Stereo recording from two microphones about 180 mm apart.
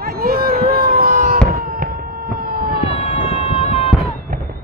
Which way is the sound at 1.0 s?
50° right (ahead or behind).